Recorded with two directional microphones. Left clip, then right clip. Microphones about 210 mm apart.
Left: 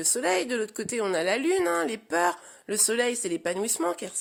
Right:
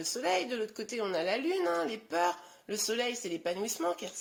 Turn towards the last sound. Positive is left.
turn(degrees=55)  # may be behind; listen again after turning